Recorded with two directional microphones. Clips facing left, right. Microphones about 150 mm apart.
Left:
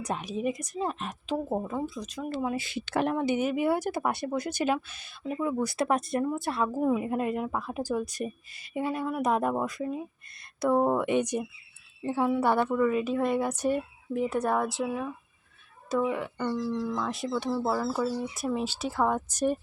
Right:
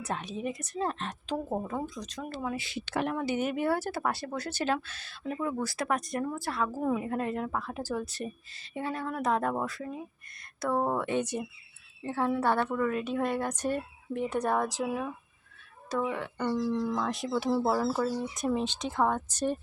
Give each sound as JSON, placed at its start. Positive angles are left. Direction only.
{"t": 0.0, "sound": "speech", "side_deg": 10}
{"t": 2.3, "sound": "speech", "side_deg": 20}
{"t": 2.6, "sound": "speech", "side_deg": 50}
{"t": 3.2, "sound": "speech", "side_deg": 20}
{"t": 3.4, "sound": "speech", "side_deg": 5}
{"t": 5.6, "sound": "speech", "side_deg": 25}
{"t": 6.8, "sound": "a woman's voice", "side_deg": 10}
{"t": 17.0, "sound": "a woman's voice", "side_deg": 0}